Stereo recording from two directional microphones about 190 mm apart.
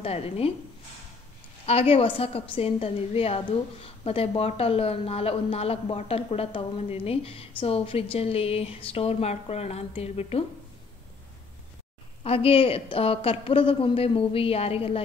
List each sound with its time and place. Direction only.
0.0 s a woman's voice: 30° left (ahead or behind)
1.7 s a woman's voice: 30° left (ahead or behind)
12.2 s speech: 30° left (ahead or behind)